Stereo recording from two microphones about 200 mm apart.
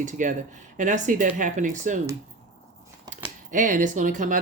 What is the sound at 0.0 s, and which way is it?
Speech, 40° right (ahead or behind).